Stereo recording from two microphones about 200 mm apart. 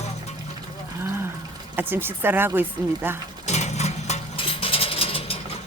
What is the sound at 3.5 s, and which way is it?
Mechanisms, 35° left (ahead or behind).